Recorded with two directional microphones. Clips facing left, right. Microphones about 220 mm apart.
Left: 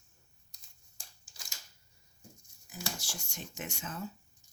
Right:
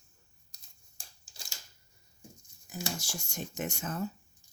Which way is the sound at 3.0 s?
45° right (ahead or behind).